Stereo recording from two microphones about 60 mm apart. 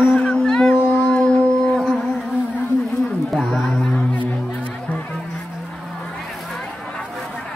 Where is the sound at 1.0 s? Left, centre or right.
Centre.